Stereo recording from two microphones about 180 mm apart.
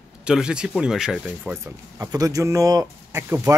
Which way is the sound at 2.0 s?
20° right (ahead or behind).